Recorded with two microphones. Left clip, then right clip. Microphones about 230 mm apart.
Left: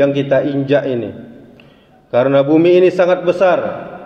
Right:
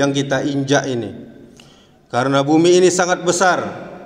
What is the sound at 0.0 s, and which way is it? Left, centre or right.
Speech, right.